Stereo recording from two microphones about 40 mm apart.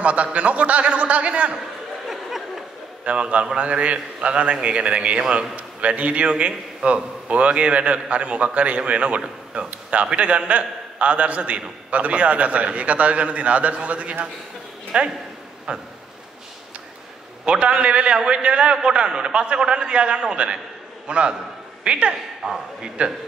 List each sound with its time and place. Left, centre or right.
0.0 s a man's voice: right
2.0 s a sound: centre
3.1 s a man's voice: right
14.9 s a man's voice: centre
17.5 s a man's voice: right
22.4 s a man's voice: centre